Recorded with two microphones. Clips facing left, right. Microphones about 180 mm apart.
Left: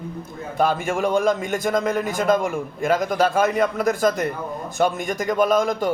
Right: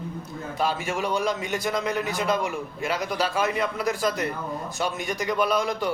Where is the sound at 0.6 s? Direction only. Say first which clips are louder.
Left 6 dB; 55° left (ahead or behind).